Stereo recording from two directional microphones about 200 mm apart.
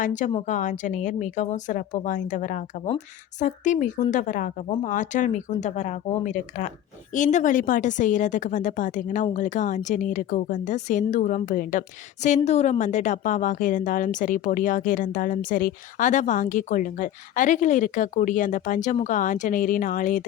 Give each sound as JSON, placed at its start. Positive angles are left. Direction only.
{"t": 0.0, "sound": "speech", "side_deg": 40}